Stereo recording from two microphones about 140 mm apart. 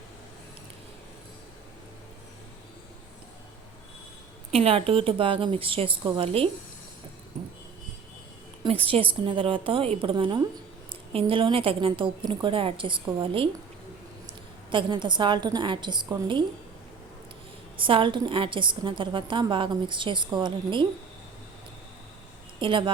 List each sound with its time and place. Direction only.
4.5 s a woman's voice: 45° right (ahead or behind)
8.6 s a woman's voice: 40° right (ahead or behind)
14.7 s a woman's voice: 35° right (ahead or behind)
17.7 s a woman's voice: 40° right (ahead or behind)
22.6 s a woman's voice: 35° right (ahead or behind)